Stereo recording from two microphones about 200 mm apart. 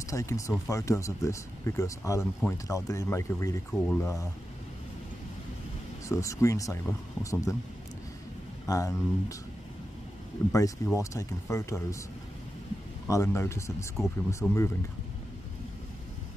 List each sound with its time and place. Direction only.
0.1 s speech: 15° left (ahead or behind)
3.7 s speech: 5° left (ahead or behind)
6.0 s speech: 15° left (ahead or behind)
8.6 s speech: 15° left (ahead or behind)
11.0 s speech: 15° left (ahead or behind)
13.1 s speech: 15° left (ahead or behind)
13.9 s speech: centre (ahead or behind)